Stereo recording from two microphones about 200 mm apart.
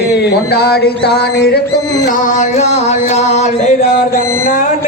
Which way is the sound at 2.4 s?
35° left (ahead or behind).